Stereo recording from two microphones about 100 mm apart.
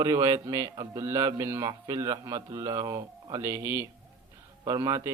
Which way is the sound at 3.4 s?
25° right (ahead or behind).